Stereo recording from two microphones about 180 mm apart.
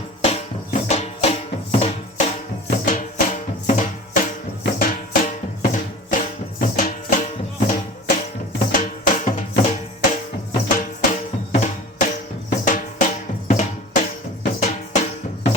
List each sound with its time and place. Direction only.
0.3 s music: 40° left (ahead or behind)
2.6 s music: 45° left (ahead or behind)